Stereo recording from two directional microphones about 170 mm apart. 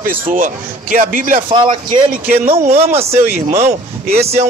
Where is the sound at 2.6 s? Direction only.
40° right (ahead or behind).